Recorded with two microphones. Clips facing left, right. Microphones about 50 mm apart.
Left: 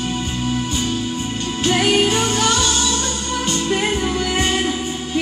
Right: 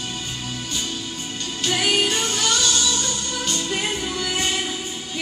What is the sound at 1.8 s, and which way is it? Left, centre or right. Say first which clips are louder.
Music: left 4 dB; centre.